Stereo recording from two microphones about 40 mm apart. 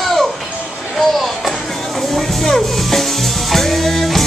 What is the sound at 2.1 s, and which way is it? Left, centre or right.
Music, centre.